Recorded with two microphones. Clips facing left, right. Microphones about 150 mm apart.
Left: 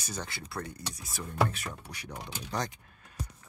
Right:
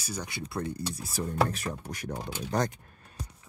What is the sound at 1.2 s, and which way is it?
Speech, 40° right (ahead or behind).